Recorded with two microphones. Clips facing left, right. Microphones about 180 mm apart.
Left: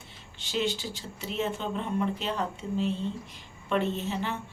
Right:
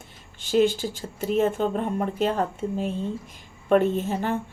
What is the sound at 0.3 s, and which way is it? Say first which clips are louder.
Speech: right 9 dB; 50° right (ahead or behind).